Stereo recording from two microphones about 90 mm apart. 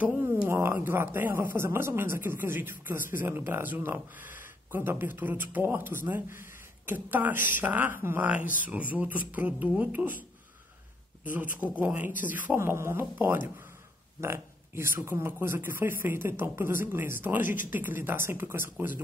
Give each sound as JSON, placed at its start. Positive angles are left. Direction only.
{"t": 0.0, "sound": "a sound", "side_deg": -20}
{"t": 0.5, "sound": "speech", "side_deg": -30}
{"t": 11.2, "sound": "speech", "side_deg": -20}
{"t": 12.5, "sound": "speech", "side_deg": -30}